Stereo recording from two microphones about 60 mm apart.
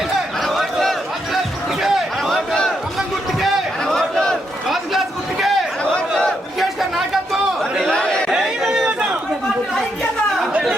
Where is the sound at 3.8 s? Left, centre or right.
Centre.